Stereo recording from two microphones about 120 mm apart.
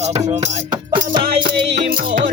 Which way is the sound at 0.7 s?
45° right (ahead or behind).